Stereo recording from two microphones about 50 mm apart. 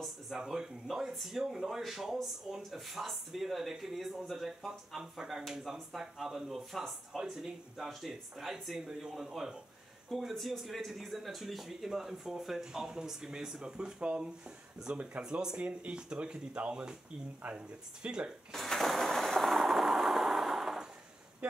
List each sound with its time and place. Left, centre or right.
0.3 s speech: centre
7.2 s speech: centre
10.0 s speech: centre; by 15.2 s right
15.2 s speech: centre
18.0 s speech: centre
18.5 s a sound: centre
19.5 s a sound: centre